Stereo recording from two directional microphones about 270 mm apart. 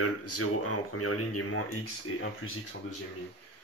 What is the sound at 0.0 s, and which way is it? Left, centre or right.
Speech, left.